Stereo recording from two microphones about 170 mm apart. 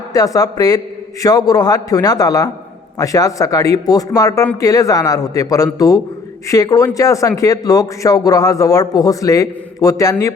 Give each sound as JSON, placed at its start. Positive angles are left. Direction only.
{"t": 0.1, "sound": "speech", "side_deg": 20}